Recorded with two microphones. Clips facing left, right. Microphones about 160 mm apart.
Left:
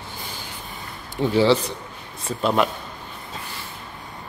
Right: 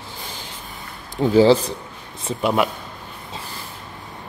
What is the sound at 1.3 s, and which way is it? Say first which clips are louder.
Speech: right 5 dB; 40° right (ahead or behind).